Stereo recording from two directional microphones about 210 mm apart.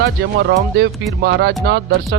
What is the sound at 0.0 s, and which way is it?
Speech, 55° right (ahead or behind).